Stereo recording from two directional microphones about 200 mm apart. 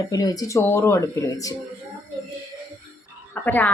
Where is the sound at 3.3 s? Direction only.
10° left (ahead or behind).